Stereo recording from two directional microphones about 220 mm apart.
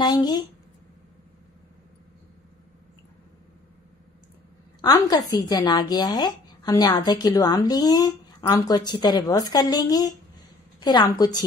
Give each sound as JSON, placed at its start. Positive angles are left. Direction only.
{"t": 0.0, "sound": "a woman's voice", "side_deg": 20}
{"t": 4.8, "sound": "a woman's voice", "side_deg": 15}